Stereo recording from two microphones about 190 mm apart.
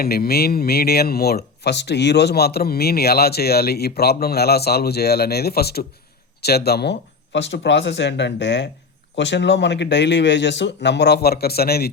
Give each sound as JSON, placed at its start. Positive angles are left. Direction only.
{"t": 0.0, "sound": "speech", "side_deg": 55}